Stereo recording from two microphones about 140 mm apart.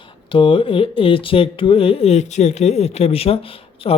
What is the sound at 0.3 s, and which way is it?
Speech, 35° left (ahead or behind).